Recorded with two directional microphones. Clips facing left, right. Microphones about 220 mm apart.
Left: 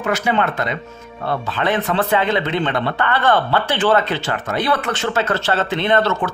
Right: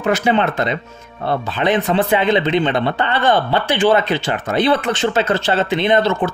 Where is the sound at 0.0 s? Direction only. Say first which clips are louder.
Right 3 dB; 25° right (ahead or behind).